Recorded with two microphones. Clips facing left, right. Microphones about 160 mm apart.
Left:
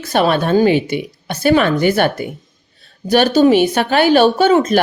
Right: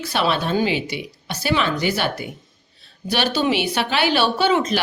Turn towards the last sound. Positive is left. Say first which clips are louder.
# left 7 dB
turn(degrees=45)  # may be behind; listen again after turning